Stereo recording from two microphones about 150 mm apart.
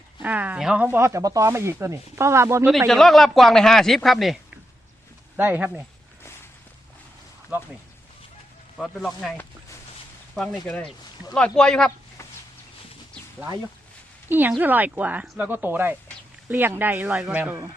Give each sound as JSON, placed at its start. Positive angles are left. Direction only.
{"t": 0.2, "sound": "speech", "side_deg": -10}
{"t": 2.6, "sound": "speech", "side_deg": 0}
{"t": 5.4, "sound": "speech", "side_deg": -10}
{"t": 7.5, "sound": "speech", "side_deg": -10}
{"t": 8.8, "sound": "speech", "side_deg": 0}
{"t": 10.3, "sound": "speech", "side_deg": 0}
{"t": 14.3, "sound": "a woman's voice", "side_deg": -15}